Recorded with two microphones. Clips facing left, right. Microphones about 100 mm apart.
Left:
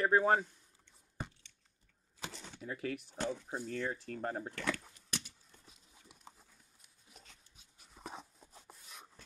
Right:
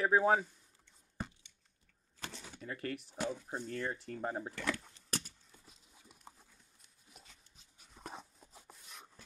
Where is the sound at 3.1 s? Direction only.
5° right (ahead or behind).